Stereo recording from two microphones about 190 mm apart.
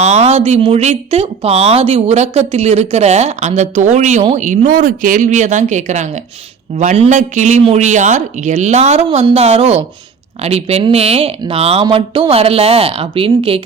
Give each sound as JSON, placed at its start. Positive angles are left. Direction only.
{"t": 0.0, "sound": "speech", "side_deg": -35}